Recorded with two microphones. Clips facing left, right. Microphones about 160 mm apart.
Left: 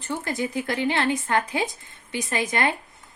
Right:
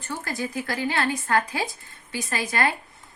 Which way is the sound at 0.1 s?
20° left (ahead or behind).